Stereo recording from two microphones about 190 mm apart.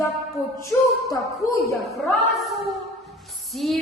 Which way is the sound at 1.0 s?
15° left (ahead or behind).